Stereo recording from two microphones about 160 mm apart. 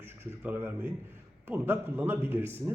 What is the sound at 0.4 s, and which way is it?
Speech, 10° right (ahead or behind).